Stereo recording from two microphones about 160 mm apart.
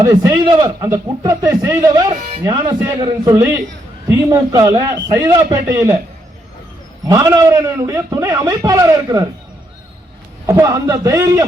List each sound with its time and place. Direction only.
0.0 s a man's voice: 20° right (ahead or behind)
7.1 s a man's voice: 20° right (ahead or behind)
10.4 s a man's voice: 20° right (ahead or behind)